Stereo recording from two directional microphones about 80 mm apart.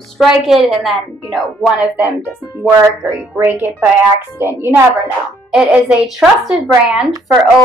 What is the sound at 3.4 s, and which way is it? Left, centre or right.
A woman's voice, right.